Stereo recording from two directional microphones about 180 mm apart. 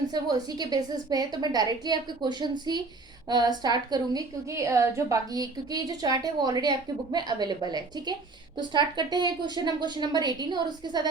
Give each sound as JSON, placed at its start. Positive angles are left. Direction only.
{"t": 0.1, "sound": "a woman's voice", "side_deg": -20}